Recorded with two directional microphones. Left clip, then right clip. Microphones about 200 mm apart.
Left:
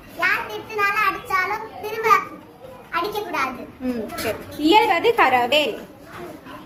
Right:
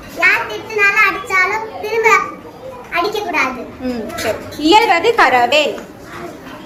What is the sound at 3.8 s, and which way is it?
A woman's voice, 25° left (ahead or behind).